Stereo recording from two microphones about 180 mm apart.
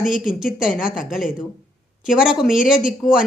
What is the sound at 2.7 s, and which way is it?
Speech, 50° left (ahead or behind).